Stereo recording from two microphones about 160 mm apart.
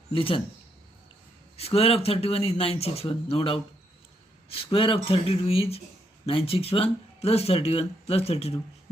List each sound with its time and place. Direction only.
0.1 s speech: 35° left (ahead or behind)
1.5 s speech: 40° left (ahead or behind)